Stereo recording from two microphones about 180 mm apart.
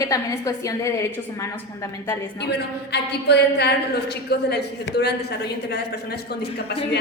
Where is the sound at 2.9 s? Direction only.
70° left (ahead or behind).